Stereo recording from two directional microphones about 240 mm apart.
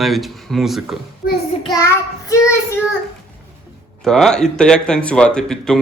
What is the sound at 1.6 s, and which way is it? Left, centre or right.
Child singing, centre.